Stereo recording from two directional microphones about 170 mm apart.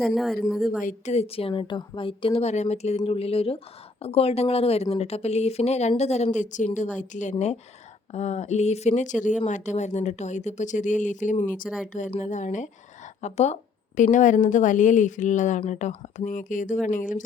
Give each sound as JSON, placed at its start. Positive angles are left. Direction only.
{"t": 0.0, "sound": "speech", "side_deg": 0}
{"t": 0.8, "sound": "a woman's voice", "side_deg": 45}